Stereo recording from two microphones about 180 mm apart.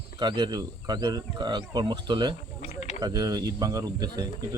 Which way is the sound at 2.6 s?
40° left (ahead or behind).